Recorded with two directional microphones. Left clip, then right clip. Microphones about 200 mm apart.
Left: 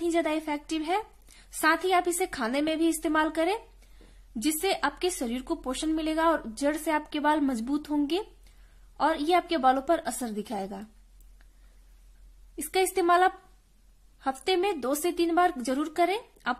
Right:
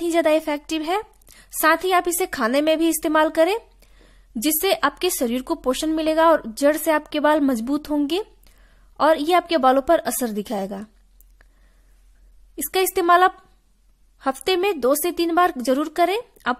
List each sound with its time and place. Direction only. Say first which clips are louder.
0.0 s a woman's voice: right 9 dB; 40° right (ahead or behind)
12.5 s a woman's voice: right 5 dB; 40° right (ahead or behind)